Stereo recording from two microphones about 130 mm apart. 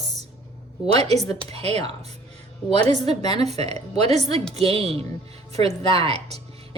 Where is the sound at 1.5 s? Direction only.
55° right (ahead or behind).